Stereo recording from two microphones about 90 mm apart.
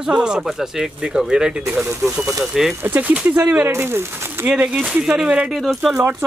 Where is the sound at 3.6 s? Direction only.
25° right (ahead or behind).